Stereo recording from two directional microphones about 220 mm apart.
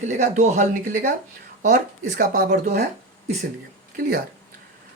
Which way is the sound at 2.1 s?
40° right (ahead or behind).